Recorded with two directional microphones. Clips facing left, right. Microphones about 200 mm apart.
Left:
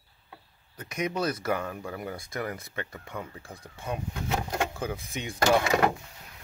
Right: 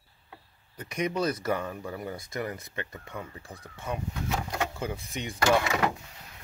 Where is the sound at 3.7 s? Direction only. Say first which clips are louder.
Even; 15° left (ahead or behind).